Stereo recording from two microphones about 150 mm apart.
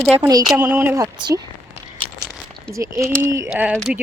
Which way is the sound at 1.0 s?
25° right (ahead or behind).